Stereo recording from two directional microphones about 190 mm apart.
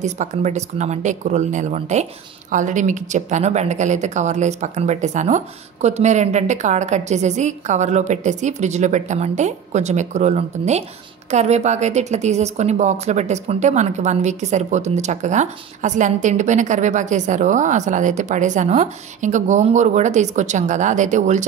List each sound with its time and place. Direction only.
0.0 s a woman's voice: 40° right (ahead or behind)